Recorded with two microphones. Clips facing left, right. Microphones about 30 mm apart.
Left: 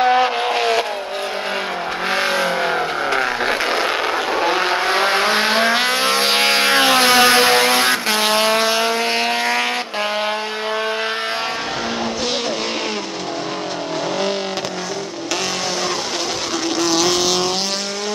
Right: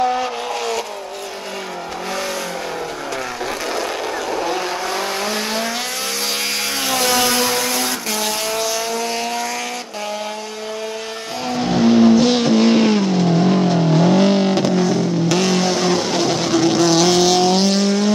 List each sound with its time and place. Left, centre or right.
4.5 s vehicle: left
11.7 s vehicle: centre